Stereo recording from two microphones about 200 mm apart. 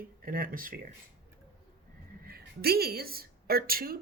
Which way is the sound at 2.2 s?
50° right (ahead or behind).